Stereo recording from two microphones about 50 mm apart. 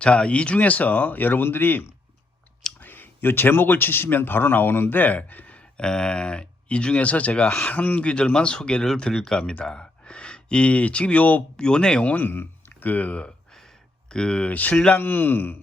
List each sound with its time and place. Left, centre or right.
0.0 s speech: centre; by 1.8 s left
2.8 s speech: left
5.7 s speech: centre; by 11.4 s left
11.5 s speech: centre
12.0 s speech: left
12.3 s speech: left; by 14.5 s centre
14.5 s speech: left